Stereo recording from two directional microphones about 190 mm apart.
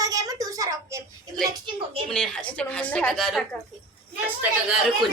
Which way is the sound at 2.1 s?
5° left (ahead or behind).